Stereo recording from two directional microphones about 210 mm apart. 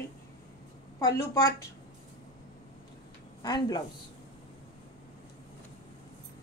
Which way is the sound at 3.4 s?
20° left (ahead or behind).